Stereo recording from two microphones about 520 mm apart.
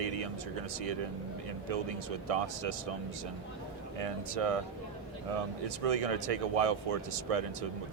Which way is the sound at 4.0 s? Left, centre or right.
Right.